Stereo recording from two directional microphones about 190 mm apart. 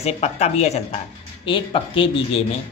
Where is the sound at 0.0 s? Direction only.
35° left (ahead or behind).